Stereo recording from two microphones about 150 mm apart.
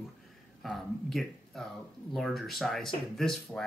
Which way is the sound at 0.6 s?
Centre (ahead or behind).